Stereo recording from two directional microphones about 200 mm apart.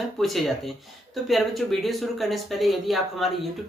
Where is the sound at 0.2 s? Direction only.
Centre (ahead or behind).